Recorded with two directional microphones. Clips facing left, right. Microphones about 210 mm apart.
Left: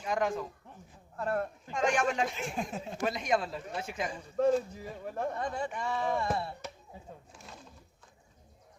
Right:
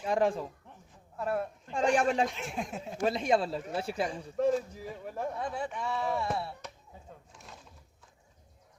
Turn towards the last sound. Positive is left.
turn(degrees=0)  # may be behind; listen again after turning